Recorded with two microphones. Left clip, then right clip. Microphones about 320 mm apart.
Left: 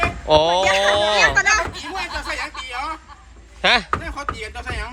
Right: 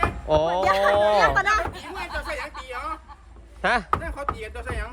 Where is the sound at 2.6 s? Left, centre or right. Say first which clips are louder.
Left 5 dB; centre.